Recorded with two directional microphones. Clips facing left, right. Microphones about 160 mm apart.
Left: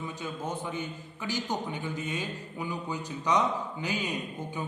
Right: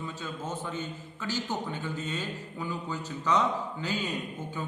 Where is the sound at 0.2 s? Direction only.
15° left (ahead or behind).